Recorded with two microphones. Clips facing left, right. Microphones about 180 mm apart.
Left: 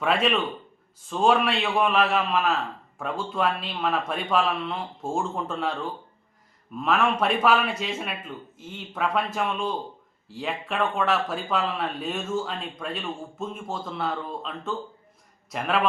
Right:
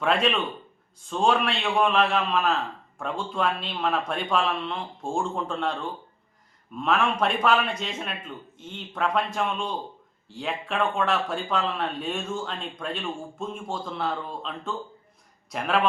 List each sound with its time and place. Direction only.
0.0 s a man's voice: centre (ahead or behind)